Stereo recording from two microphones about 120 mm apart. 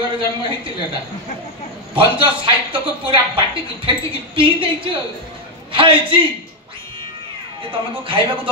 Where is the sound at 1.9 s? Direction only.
45° right (ahead or behind).